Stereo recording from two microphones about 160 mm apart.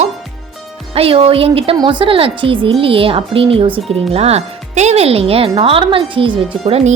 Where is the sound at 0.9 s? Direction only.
35° right (ahead or behind).